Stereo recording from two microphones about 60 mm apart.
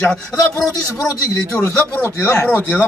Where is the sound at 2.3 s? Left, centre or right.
Left.